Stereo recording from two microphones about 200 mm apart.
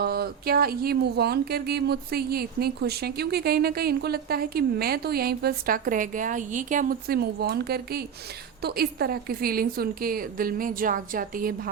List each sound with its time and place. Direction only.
0.0 s speech: 50° right (ahead or behind)